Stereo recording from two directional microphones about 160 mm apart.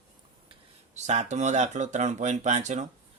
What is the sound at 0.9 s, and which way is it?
Speech, 45° right (ahead or behind).